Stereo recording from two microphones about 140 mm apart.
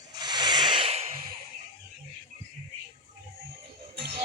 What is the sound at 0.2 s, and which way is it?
Rub, 30° right (ahead or behind).